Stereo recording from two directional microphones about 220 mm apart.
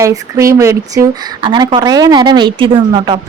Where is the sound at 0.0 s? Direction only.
15° right (ahead or behind).